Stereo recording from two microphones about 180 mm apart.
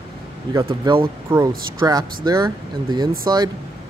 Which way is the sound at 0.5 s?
25° right (ahead or behind).